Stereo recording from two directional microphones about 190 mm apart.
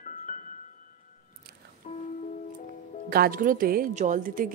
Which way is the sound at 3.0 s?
50° right (ahead or behind).